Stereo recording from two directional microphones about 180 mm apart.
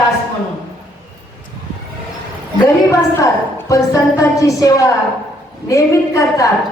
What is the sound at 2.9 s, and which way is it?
A woman's voice, 15° left (ahead or behind).